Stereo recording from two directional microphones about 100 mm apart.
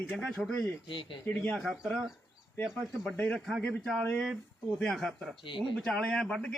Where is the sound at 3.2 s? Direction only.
15° left (ahead or behind).